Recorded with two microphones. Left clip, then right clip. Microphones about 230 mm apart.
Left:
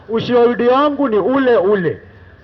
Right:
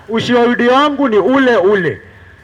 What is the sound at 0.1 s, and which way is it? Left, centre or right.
A man's voice, right.